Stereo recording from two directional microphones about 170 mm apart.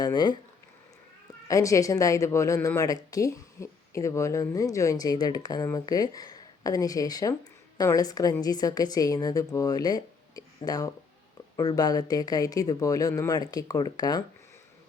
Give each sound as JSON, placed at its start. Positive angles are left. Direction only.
{"t": 0.0, "sound": "speech", "side_deg": 25}
{"t": 1.5, "sound": "speech", "side_deg": 20}